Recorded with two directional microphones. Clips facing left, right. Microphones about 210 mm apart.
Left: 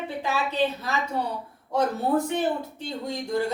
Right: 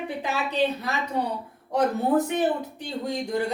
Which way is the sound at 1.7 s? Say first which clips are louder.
Right 2 dB; 15° right (ahead or behind).